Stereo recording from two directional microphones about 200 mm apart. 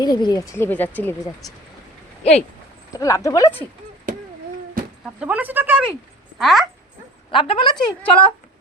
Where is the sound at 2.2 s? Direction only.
35° left (ahead or behind).